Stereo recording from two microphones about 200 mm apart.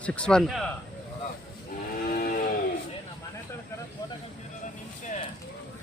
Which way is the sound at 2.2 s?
45° left (ahead or behind).